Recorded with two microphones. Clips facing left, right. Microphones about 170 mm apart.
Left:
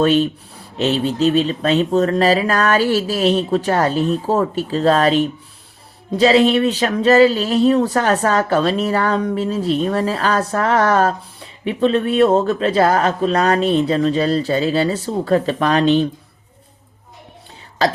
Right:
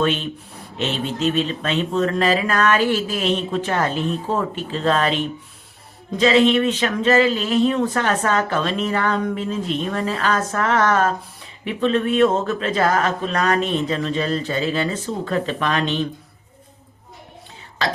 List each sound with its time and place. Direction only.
0.0 s speech: 40° left (ahead or behind)